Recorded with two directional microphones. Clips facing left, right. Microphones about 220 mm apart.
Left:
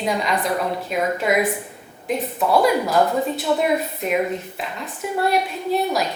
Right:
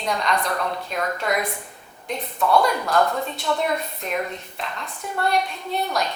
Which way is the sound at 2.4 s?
25° left (ahead or behind).